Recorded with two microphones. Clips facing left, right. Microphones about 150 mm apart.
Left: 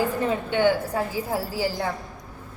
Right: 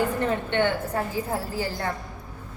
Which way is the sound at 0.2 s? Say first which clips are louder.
Left 1 dB; 10° left (ahead or behind).